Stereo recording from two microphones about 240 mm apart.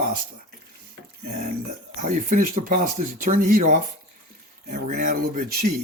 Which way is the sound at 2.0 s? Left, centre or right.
Right.